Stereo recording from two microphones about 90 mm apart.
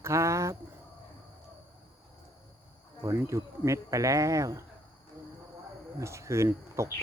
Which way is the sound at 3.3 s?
35° right (ahead or behind).